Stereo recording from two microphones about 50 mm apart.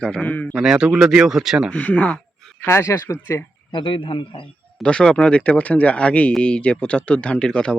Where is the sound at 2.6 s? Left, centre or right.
Left.